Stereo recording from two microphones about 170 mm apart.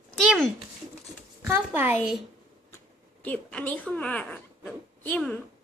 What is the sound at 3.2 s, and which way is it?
Speech, 5° left (ahead or behind).